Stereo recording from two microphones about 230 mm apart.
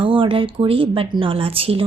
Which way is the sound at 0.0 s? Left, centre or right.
Right.